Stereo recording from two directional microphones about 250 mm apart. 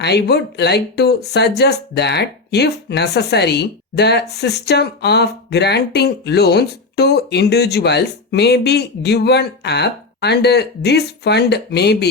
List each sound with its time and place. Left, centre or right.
0.0 s speech: left